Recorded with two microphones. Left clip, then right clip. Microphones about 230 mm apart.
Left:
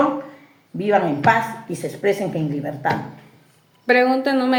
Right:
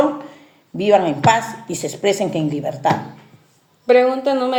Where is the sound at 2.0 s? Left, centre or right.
Right.